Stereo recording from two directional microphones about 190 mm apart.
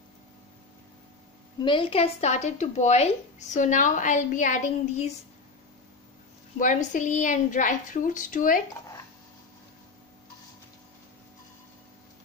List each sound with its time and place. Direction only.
1.6 s a woman's voice: 25° left (ahead or behind)
6.6 s a woman's voice: 40° left (ahead or behind)